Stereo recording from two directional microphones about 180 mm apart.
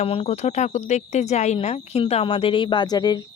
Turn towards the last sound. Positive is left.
turn(degrees=20)  # may be behind; listen again after turning